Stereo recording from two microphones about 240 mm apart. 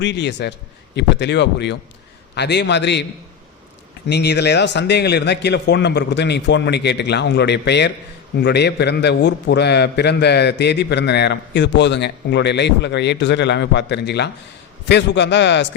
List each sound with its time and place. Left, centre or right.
0.0 s a man's voice: left